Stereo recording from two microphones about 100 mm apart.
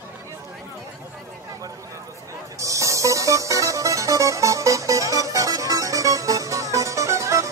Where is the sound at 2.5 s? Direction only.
30° right (ahead or behind).